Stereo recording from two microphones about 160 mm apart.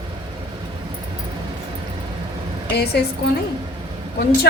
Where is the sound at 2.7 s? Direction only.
90° left.